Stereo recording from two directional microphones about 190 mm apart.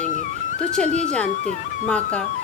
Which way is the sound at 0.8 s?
35° right (ahead or behind).